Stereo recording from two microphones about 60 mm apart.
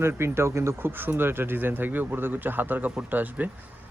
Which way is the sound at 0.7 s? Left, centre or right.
Right.